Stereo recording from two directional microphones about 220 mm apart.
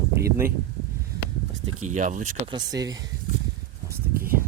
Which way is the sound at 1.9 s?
35° right (ahead or behind).